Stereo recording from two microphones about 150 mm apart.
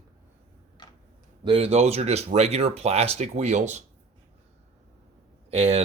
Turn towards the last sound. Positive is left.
turn(degrees=-40)  # may be behind; listen again after turning